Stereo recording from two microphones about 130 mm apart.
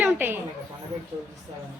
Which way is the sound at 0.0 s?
15° right (ahead or behind).